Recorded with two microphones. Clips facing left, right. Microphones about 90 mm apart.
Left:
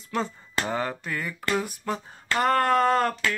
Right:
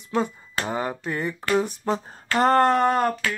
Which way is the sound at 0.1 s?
15° right (ahead or behind).